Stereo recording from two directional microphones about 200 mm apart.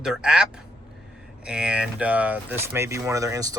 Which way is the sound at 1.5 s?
5° right (ahead or behind).